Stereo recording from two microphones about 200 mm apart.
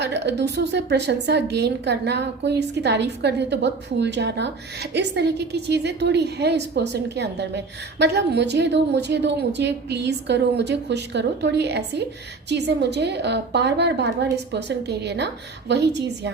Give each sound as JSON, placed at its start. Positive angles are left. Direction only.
{"t": 0.0, "sound": "a woman's voice", "side_deg": -60}